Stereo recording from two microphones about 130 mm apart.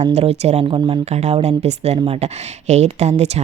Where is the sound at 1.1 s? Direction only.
55° right (ahead or behind).